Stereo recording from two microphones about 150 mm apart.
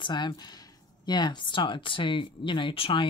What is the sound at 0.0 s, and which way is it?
Speech, 30° left (ahead or behind).